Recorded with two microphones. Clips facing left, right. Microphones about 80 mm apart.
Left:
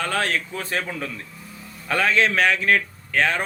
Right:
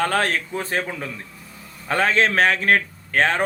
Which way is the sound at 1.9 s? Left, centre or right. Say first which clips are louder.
Right 1 dB; right.